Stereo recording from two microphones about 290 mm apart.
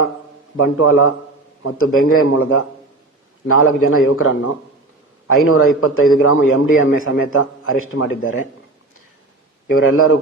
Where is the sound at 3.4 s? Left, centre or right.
Left.